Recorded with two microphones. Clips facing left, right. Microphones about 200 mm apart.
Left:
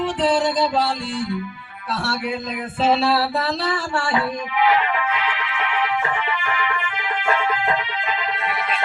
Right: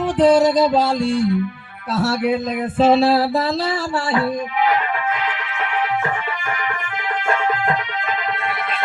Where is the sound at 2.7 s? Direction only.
40° right (ahead or behind).